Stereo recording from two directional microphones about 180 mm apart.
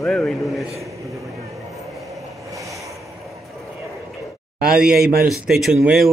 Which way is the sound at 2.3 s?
15° right (ahead or behind).